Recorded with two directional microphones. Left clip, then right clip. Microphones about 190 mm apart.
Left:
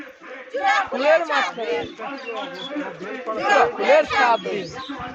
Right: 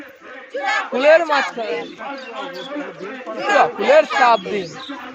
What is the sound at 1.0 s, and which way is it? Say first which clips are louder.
Speech: right 9 dB; 55° right (ahead or behind).